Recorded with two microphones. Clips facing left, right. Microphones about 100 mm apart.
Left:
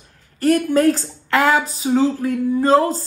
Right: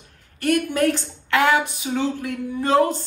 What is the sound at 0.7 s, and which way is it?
A woman's voice, 40° left (ahead or behind).